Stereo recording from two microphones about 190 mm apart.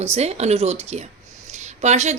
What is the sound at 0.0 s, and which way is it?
A woman's voice, 35° right (ahead or behind).